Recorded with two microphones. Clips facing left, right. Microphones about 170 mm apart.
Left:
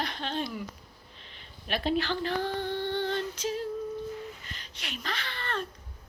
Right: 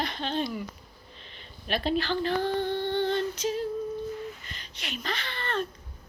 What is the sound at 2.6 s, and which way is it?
Music, 20° right (ahead or behind).